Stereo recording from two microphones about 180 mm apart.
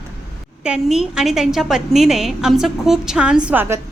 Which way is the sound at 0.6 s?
5° right (ahead or behind).